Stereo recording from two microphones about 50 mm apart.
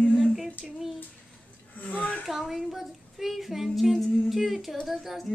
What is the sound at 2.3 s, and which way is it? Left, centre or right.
Child singing, centre.